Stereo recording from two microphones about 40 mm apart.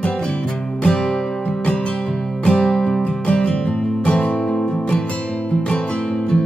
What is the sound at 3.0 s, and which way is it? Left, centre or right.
Music, left.